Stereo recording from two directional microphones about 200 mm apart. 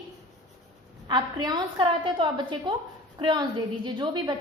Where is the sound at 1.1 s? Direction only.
20° right (ahead or behind).